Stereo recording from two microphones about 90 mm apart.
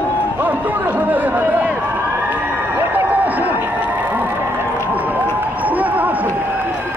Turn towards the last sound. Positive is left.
turn(degrees=-20)  # may be behind; listen again after turning